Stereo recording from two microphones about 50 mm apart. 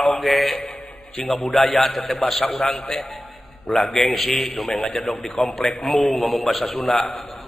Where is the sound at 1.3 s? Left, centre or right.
Centre.